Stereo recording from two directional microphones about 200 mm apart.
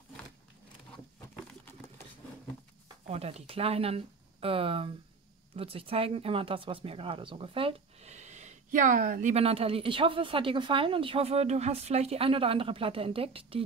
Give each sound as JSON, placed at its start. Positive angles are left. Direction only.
{"t": 3.1, "sound": "speech", "side_deg": -30}